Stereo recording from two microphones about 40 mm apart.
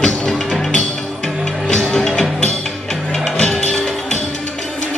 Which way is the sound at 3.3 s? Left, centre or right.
Centre.